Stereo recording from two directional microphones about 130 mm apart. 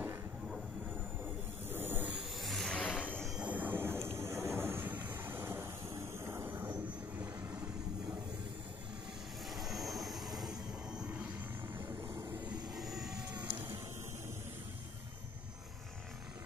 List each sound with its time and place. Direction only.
1.7 s a sound: 15° right (ahead or behind)
2.4 s vehicle: centre (ahead or behind)
3.3 s vehicle: 10° right (ahead or behind)
9.5 s vehicle: centre (ahead or behind)
12.4 s vehicle: centre (ahead or behind)